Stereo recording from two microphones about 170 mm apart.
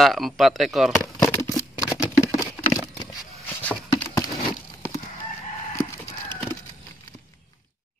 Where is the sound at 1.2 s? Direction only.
20° left (ahead or behind).